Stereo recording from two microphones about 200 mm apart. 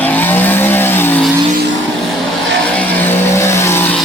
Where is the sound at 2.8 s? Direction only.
10° left (ahead or behind).